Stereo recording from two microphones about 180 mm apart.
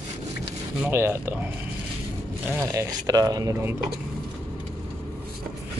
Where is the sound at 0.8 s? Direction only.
10° right (ahead or behind).